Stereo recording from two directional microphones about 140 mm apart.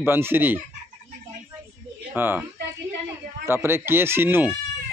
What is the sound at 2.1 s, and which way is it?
A man's voice, 15° right (ahead or behind).